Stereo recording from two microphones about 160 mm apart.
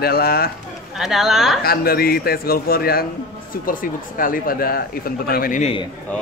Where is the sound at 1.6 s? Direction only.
70° left (ahead or behind).